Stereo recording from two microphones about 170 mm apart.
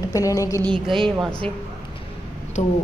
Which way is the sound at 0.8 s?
30° right (ahead or behind).